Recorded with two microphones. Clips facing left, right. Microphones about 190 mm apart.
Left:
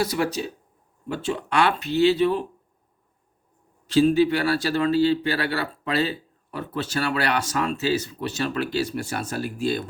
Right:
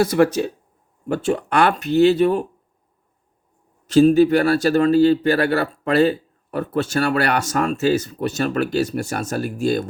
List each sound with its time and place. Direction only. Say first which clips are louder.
0.0 s speech: right 8 dB; 50° right (ahead or behind)
3.8 s speech: right 5 dB; 45° right (ahead or behind)